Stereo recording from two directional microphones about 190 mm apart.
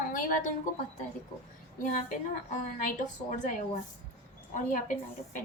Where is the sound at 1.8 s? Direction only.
40° left (ahead or behind).